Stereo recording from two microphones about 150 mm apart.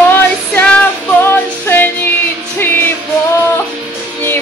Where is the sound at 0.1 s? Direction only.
10° left (ahead or behind).